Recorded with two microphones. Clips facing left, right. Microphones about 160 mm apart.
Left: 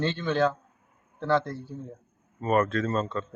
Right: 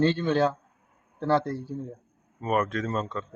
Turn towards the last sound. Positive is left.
turn(degrees=-10)  # may be behind; listen again after turning